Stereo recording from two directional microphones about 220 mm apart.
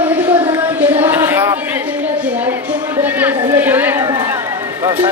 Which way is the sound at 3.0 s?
10° right (ahead or behind).